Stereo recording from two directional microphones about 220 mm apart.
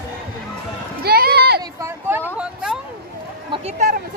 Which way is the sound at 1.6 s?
15° right (ahead or behind).